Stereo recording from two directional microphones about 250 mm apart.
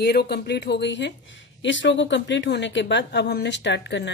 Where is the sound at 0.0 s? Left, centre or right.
Left.